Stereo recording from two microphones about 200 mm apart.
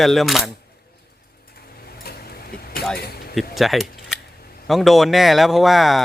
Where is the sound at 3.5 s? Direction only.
Centre (ahead or behind).